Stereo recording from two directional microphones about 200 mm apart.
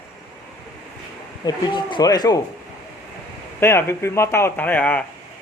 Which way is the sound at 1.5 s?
20° left (ahead or behind).